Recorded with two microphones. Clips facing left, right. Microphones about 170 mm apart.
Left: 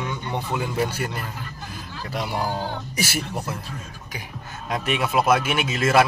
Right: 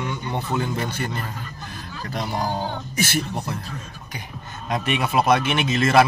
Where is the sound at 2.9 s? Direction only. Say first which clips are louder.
Right 5 dB; 10° left (ahead or behind).